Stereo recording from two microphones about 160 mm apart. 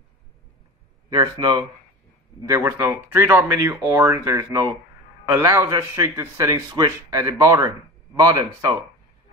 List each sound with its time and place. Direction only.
1.4 s a man's voice: 25° right (ahead or behind)